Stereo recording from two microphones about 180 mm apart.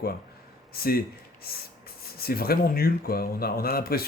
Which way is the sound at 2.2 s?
55° left (ahead or behind).